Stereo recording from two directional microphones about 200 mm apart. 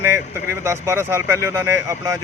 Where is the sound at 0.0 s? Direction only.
10° right (ahead or behind).